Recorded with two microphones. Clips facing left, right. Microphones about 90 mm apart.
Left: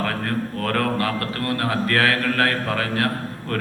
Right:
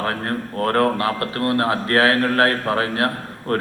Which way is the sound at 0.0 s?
35° right (ahead or behind).